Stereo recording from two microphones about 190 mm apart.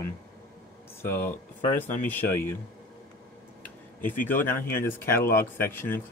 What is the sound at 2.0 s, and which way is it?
Speech, 10° left (ahead or behind).